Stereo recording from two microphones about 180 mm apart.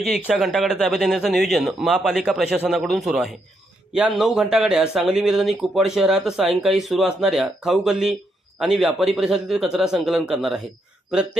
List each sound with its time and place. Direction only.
0.1 s speech: centre (ahead or behind)